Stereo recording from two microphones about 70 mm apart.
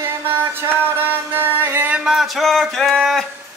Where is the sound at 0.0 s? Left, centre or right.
Right.